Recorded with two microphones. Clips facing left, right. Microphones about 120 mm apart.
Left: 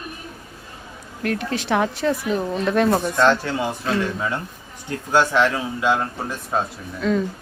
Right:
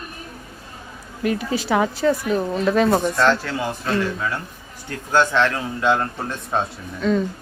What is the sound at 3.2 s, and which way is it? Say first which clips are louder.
Speech: left 1 dB; 15° left (ahead or behind).